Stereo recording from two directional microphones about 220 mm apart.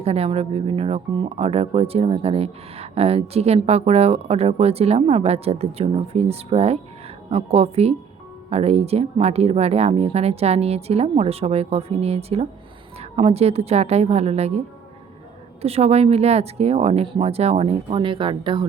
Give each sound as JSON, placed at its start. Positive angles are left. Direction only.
{"t": 0.0, "sound": "speech", "side_deg": -25}
{"t": 15.6, "sound": "speech", "side_deg": -30}